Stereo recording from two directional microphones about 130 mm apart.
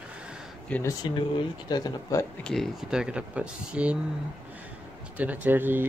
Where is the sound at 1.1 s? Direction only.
35° left (ahead or behind).